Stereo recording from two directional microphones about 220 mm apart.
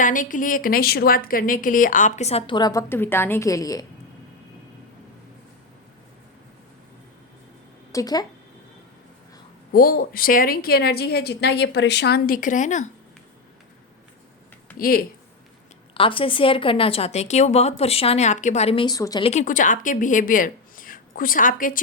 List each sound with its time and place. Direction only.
0.0 s a woman's voice: 35° left (ahead or behind); by 3.8 s 15° left (ahead or behind)
7.9 s speech: 15° left (ahead or behind)
9.7 s a woman's voice: 45° left (ahead or behind)
14.8 s a woman's voice: 40° left (ahead or behind)
16.0 s a woman's voice: 25° left (ahead or behind)
19.3 s speech: 35° left (ahead or behind)